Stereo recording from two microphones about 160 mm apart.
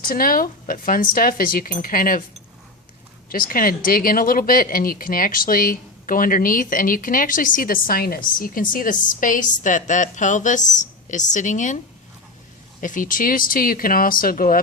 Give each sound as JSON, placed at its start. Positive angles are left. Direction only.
{"t": 0.0, "sound": "speech", "side_deg": 65}
{"t": 3.2, "sound": "speech", "side_deg": 65}
{"t": 12.8, "sound": "speech", "side_deg": 55}